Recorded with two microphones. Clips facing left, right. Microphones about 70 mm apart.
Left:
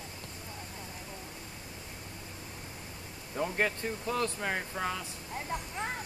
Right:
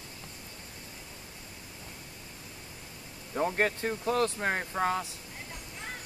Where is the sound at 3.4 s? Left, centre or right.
Right.